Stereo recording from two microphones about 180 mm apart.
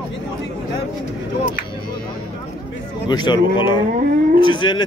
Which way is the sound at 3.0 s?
25° left (ahead or behind).